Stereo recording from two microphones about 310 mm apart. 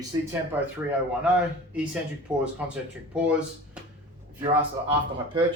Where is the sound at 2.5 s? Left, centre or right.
Centre.